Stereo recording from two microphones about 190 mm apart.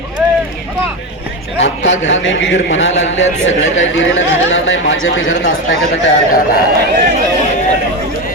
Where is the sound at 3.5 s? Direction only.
90° left.